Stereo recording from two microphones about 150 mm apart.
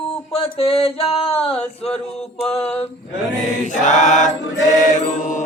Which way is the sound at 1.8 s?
40° left (ahead or behind).